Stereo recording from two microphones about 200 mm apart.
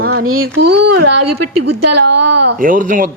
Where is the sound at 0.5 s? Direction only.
55° right (ahead or behind).